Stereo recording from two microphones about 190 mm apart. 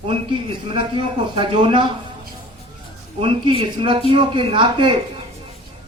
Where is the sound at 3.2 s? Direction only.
30° right (ahead or behind).